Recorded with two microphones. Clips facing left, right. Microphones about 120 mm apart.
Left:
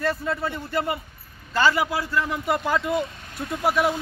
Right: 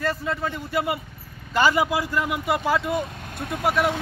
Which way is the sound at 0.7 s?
15° right (ahead or behind).